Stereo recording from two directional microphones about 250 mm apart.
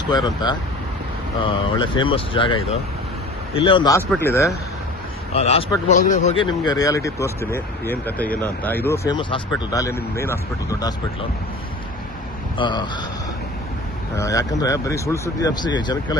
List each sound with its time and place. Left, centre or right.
0.0 s speech: centre
5.3 s speech: left
12.5 s speech: centre
14.2 s speech: centre